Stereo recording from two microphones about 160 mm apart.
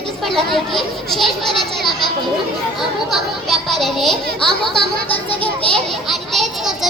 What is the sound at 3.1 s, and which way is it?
Speech, centre (ahead or behind).